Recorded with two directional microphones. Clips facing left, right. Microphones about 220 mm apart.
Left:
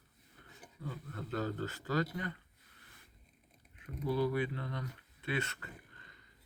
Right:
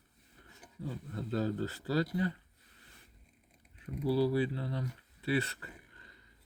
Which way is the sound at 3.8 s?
35° right (ahead or behind).